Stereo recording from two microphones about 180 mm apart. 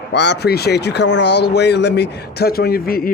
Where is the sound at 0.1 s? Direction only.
70° left (ahead or behind).